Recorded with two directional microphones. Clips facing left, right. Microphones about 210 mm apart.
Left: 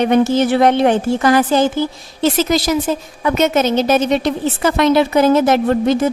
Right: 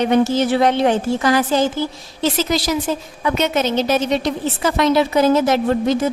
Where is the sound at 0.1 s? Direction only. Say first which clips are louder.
Left 2 dB; 55° left (ahead or behind).